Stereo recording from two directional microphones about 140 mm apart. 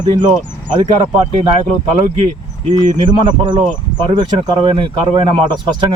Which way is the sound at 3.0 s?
35° right (ahead or behind).